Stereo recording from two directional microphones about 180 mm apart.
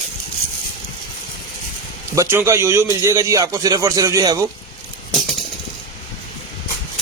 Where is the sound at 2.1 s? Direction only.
15° right (ahead or behind).